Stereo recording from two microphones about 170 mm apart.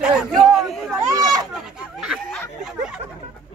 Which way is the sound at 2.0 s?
Centre (ahead or behind).